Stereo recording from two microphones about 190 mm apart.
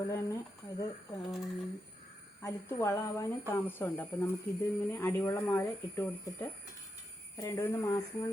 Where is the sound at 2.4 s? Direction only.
15° left (ahead or behind).